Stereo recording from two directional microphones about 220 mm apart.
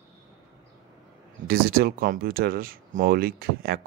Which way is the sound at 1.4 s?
40° right (ahead or behind).